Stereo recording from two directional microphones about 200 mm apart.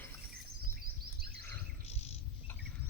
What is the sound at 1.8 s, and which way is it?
Bird, 30° left (ahead or behind).